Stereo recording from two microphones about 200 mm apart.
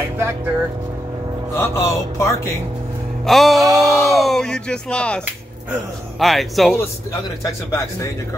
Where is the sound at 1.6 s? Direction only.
15° left (ahead or behind).